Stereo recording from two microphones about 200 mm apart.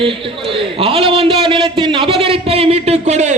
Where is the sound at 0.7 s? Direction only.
25° right (ahead or behind).